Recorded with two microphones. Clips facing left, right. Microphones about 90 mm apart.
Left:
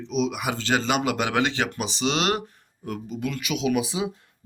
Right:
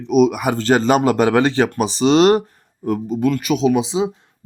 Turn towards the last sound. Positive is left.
turn(degrees=-25)  # may be behind; listen again after turning